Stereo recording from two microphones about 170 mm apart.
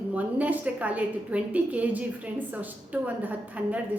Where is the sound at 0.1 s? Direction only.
10° right (ahead or behind).